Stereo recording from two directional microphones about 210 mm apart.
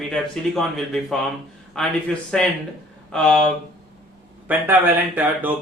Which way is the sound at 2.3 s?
5° left (ahead or behind).